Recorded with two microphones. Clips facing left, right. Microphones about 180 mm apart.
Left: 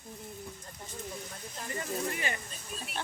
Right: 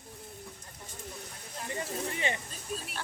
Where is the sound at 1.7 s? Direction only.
25° right (ahead or behind).